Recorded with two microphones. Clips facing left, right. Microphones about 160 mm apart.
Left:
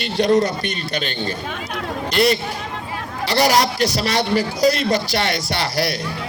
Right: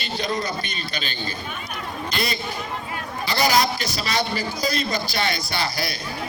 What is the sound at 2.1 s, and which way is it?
A man's voice, 75° left (ahead or behind).